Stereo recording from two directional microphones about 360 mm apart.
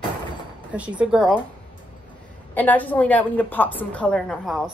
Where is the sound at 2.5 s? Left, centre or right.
Centre.